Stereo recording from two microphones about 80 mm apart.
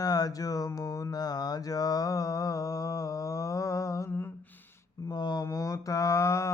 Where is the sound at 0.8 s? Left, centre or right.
Left.